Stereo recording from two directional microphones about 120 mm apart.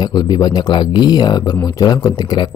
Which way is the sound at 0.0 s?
35° left (ahead or behind).